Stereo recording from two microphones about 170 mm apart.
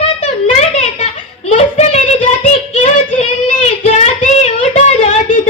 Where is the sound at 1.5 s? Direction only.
40° left (ahead or behind).